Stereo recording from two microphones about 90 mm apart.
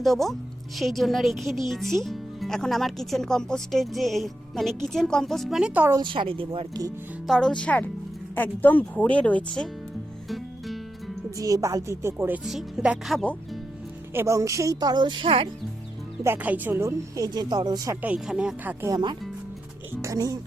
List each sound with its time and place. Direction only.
0.0 s speech: centre (ahead or behind)
6.0 s a woman's voice: 65° right (ahead or behind)
7.3 s speech: 5° left (ahead or behind)
10.2 s music: centre (ahead or behind)
11.3 s speech: 40° right (ahead or behind)
12.5 s speech: 5° right (ahead or behind)
14.1 s a woman's voice: 25° right (ahead or behind)
14.3 s speech: 35° right (ahead or behind); by 15.4 s 80° right
16.2 s speech: 20° right (ahead or behind)
17.2 s speech: 50° right (ahead or behind)
18.3 s speech: 10° right (ahead or behind)
18.6 s speech: 20° right (ahead or behind)
18.9 s speech: 50° right (ahead or behind)
20.0 s speech: 40° right (ahead or behind)